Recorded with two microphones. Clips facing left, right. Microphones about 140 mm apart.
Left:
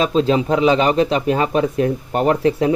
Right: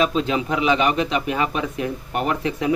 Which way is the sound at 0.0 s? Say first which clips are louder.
Left 4 dB; 35° left (ahead or behind).